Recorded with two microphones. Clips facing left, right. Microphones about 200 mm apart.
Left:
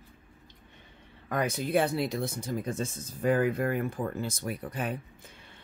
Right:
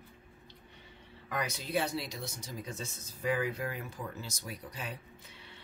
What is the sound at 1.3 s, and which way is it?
Speech, 50° left (ahead or behind).